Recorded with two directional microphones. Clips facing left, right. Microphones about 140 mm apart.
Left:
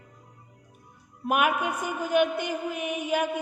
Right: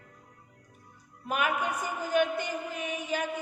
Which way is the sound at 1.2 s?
60° left (ahead or behind).